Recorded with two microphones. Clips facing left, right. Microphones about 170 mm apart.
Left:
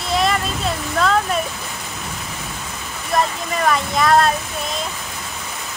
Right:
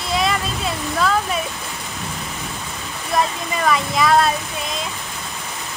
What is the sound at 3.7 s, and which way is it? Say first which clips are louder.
Speech: even; centre (ahead or behind).